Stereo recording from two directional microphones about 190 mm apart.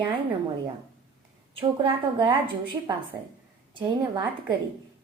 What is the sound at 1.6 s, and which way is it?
Speech, 25° right (ahead or behind).